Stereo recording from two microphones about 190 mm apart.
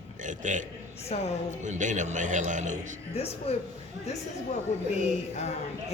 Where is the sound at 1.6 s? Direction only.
40° right (ahead or behind).